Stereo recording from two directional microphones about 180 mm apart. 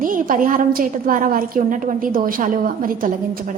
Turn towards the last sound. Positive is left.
turn(degrees=-50)  # may be behind; listen again after turning